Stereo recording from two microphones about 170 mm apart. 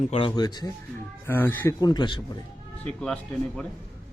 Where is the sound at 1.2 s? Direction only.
10° left (ahead or behind).